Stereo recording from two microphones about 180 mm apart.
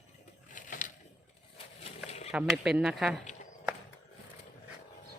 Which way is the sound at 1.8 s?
35° left (ahead or behind).